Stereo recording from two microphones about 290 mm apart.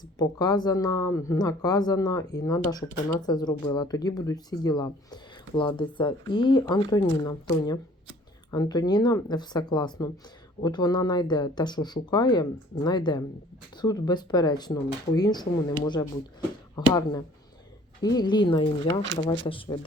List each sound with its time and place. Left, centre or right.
0.2 s speech: centre
19.0 s speech: right
19.5 s speech: centre